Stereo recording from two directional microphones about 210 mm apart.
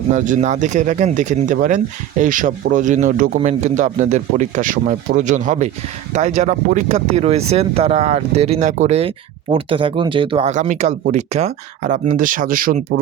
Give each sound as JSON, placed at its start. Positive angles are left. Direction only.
{"t": 0.1, "sound": "speech", "side_deg": -35}